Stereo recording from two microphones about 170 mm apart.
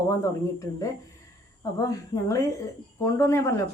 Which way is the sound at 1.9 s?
20° left (ahead or behind).